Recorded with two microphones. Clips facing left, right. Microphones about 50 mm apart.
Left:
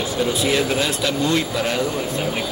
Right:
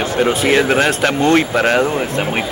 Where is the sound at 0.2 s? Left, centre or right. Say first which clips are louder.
Right 6 dB; right.